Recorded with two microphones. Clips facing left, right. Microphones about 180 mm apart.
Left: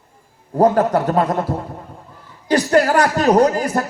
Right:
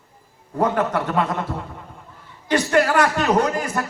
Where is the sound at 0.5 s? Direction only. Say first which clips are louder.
Left 6 dB; 35° left (ahead or behind).